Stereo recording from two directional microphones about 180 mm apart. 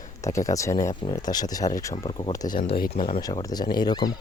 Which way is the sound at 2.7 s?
55° left (ahead or behind).